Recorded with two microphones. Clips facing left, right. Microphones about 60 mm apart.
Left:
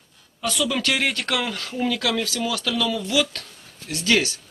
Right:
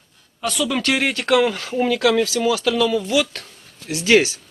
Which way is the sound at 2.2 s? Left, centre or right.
Centre.